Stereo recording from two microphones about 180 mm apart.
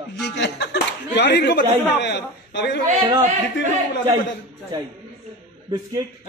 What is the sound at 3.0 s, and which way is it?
Speech, 25° right (ahead or behind).